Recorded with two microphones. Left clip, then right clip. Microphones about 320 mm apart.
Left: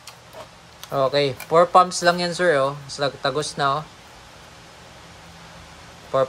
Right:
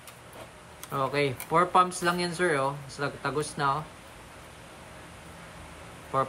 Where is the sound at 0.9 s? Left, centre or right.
Centre.